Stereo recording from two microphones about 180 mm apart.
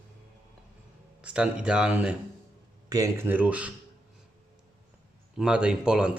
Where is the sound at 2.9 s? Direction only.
15° right (ahead or behind).